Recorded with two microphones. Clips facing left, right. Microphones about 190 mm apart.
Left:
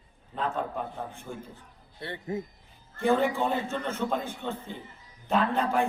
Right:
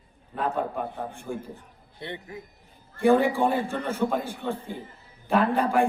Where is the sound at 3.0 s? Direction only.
15° right (ahead or behind).